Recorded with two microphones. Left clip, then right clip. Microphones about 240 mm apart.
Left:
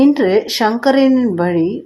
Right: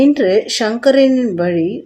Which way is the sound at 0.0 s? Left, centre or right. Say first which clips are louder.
Even; centre.